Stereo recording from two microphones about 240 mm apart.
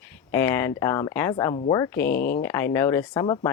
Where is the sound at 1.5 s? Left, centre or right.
Left.